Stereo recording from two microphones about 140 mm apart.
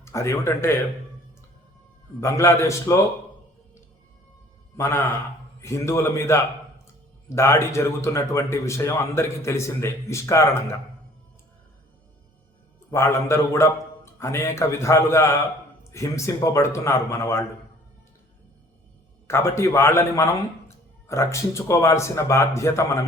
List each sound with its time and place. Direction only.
0.0 s speech: 20° left (ahead or behind)
2.2 s speech: 20° left (ahead or behind)
4.8 s speech: 20° left (ahead or behind)
12.9 s speech: 20° left (ahead or behind)
19.3 s speech: 20° left (ahead or behind)